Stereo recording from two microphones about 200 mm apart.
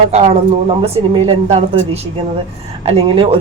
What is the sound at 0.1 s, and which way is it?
Speech, 30° right (ahead or behind).